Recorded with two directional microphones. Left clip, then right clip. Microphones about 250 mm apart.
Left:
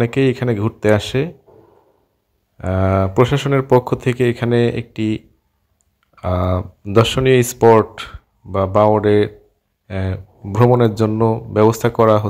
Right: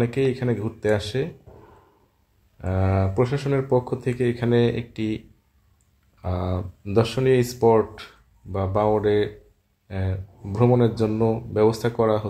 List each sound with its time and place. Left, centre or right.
0.0 s speech: left
2.5 s speech: left
6.2 s speech: left